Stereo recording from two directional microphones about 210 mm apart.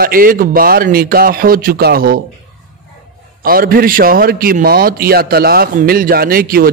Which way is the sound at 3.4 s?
45° right (ahead or behind).